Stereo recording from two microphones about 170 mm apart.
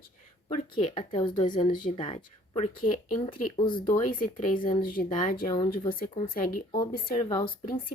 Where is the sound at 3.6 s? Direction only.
30° left (ahead or behind).